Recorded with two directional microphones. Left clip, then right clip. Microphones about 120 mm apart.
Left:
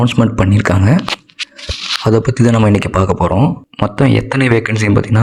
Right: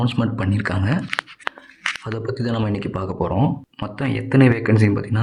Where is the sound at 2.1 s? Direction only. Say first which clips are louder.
Left 14 dB; 75° left (ahead or behind).